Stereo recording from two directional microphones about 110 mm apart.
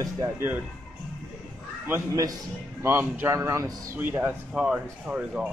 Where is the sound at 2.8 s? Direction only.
20° right (ahead or behind).